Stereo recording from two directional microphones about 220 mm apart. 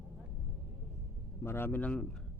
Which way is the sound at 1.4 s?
10° left (ahead or behind).